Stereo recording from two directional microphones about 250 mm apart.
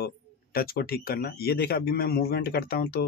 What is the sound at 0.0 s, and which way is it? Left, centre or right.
Speech, left.